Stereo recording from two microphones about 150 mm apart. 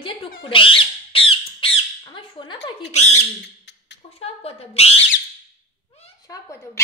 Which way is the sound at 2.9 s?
50° left (ahead or behind).